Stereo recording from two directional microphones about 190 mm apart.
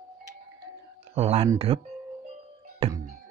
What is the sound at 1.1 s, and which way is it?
Speech, 35° right (ahead or behind).